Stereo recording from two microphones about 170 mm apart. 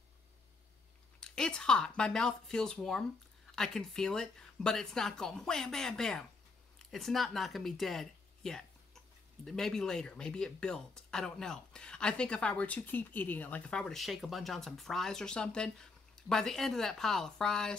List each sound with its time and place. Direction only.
1.2 s speech: 5° left (ahead or behind)